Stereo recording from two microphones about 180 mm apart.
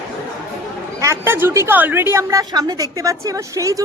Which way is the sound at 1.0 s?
15° right (ahead or behind).